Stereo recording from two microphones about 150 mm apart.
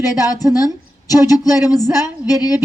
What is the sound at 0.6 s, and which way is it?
A woman's voice, 25° left (ahead or behind).